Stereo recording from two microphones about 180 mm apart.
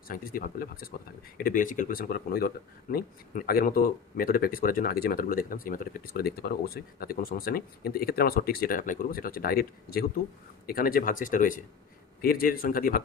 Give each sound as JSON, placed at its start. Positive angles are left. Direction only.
{"t": 0.1, "sound": "speech", "side_deg": 55}